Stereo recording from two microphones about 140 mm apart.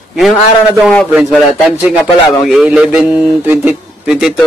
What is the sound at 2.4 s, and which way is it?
Speech, 5° right (ahead or behind).